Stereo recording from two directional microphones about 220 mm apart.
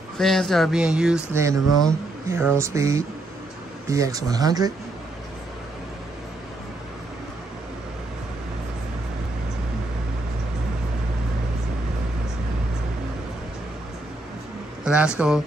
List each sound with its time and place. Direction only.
0.2 s speech: centre (ahead or behind)
1.7 s speech: centre (ahead or behind)
2.2 s speech: 10° right (ahead or behind)
14.9 s speech: 5° right (ahead or behind)